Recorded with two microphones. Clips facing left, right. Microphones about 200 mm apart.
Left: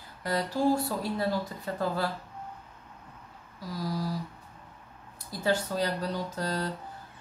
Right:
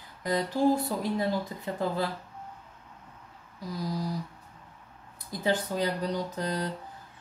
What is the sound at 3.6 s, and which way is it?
Speech, 20° right (ahead or behind).